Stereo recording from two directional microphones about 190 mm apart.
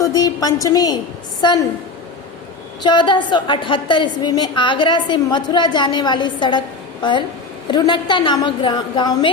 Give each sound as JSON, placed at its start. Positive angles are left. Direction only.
{"t": 0.0, "sound": "a sound", "side_deg": 20}
{"t": 1.4, "sound": "a woman's voice", "side_deg": 20}
{"t": 2.8, "sound": "a woman's voice", "side_deg": 25}